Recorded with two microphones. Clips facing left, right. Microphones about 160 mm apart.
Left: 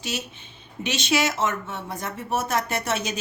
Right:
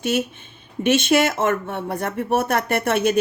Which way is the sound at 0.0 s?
55° right (ahead or behind).